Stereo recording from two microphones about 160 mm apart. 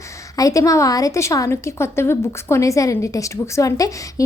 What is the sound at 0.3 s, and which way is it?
A woman's voice, 20° left (ahead or behind).